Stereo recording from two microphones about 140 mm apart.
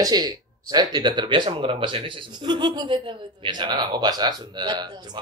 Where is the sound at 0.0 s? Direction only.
30° right (ahead or behind).